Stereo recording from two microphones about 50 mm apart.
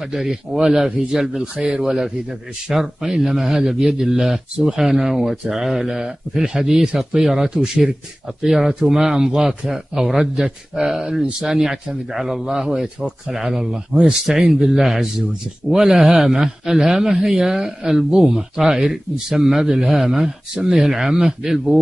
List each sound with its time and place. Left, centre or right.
0.1 s speech: centre
0.6 s speech: centre